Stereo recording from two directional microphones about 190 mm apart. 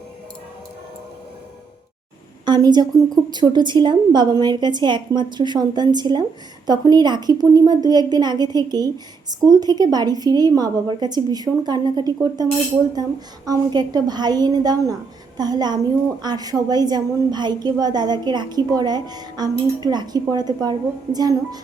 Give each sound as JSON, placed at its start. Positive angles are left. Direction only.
{"t": 2.4, "sound": "a woman's voice", "side_deg": -25}